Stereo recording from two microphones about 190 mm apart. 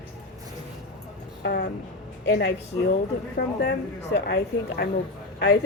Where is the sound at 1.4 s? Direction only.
55° left (ahead or behind).